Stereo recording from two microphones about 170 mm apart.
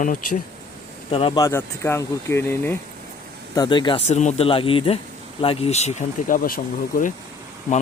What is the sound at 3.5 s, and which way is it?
Speech, 25° left (ahead or behind).